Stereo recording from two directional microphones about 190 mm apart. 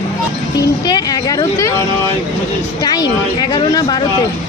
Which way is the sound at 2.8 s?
20° left (ahead or behind).